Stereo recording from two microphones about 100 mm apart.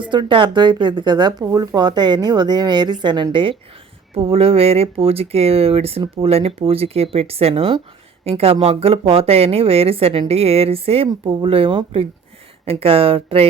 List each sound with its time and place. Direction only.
0.0 s speech: 55° right (ahead or behind)
4.1 s a woman's voice: 65° right (ahead or behind)
8.2 s a woman's voice: 80° right